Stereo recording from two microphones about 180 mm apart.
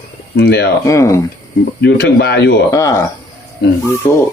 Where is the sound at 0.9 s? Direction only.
15° left (ahead or behind).